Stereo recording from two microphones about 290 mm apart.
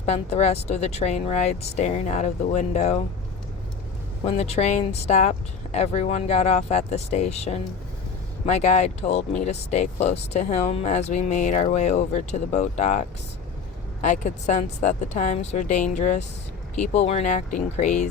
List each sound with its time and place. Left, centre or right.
0.0 s speech: left
4.3 s speech: left